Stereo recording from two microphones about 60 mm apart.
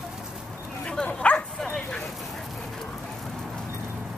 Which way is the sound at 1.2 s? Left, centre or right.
Centre.